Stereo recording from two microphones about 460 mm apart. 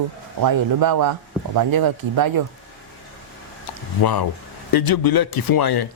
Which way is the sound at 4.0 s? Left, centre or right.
Left.